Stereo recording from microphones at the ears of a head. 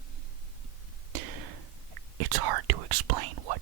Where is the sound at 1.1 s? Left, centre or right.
Right.